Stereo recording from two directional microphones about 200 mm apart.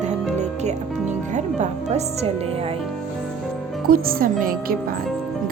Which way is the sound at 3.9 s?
45° right (ahead or behind).